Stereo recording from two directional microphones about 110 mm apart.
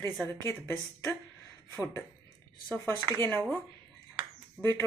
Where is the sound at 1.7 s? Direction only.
20° left (ahead or behind).